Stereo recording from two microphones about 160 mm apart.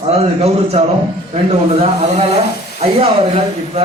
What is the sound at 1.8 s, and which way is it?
A man's voice, 40° right (ahead or behind).